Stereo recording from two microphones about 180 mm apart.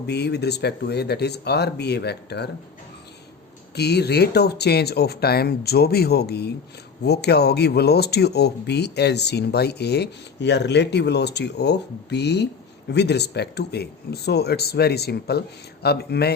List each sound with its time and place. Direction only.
0.0 s speech: 65° left (ahead or behind)
3.8 s speech: 65° left (ahead or behind)